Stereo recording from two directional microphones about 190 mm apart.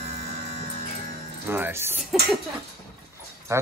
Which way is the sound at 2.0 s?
Centre (ahead or behind).